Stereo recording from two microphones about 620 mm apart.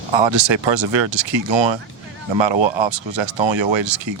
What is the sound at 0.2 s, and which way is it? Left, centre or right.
A man's voice, right.